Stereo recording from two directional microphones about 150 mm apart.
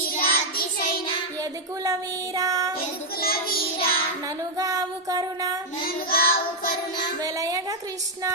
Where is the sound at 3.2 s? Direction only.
85° left.